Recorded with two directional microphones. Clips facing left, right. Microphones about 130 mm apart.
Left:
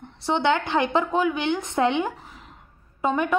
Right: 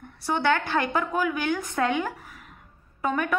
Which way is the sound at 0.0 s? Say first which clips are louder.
Left 3 dB; 25° left (ahead or behind).